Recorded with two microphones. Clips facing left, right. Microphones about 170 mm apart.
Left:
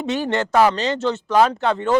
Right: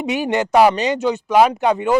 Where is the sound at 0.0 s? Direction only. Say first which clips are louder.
Right 2 dB; 15° right (ahead or behind).